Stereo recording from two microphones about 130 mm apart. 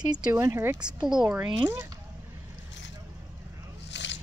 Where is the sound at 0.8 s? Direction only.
5° right (ahead or behind).